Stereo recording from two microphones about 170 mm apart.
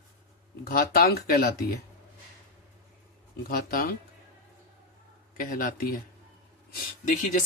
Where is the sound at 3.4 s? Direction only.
60° left (ahead or behind).